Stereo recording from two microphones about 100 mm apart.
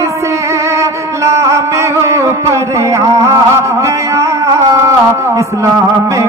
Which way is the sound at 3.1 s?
30° right (ahead or behind).